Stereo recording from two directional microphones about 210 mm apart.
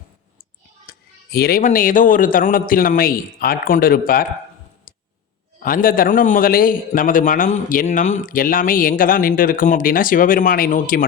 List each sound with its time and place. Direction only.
0.9 s speech: 45° left (ahead or behind)
5.5 s a man's voice: 40° left (ahead or behind)